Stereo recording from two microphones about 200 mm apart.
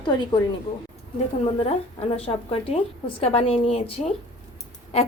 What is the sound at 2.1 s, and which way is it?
A woman's voice, 30° left (ahead or behind).